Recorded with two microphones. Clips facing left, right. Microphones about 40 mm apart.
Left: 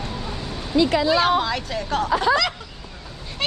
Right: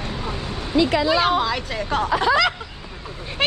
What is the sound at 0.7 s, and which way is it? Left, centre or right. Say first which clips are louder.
Speech: even; right.